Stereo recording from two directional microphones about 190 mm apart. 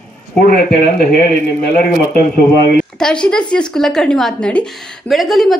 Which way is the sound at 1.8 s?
50° left (ahead or behind).